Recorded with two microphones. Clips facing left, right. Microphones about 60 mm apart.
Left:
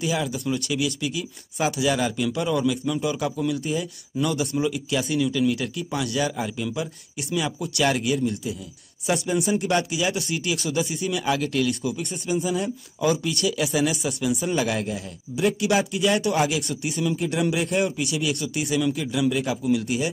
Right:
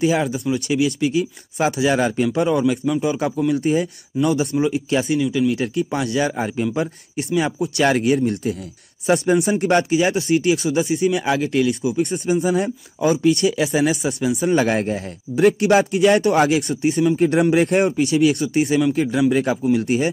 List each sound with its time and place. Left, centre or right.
0.0 s speech: right
3.5 s speech: right
4.1 s speech: centre
4.6 s speech: right
12.0 s a man's voice: right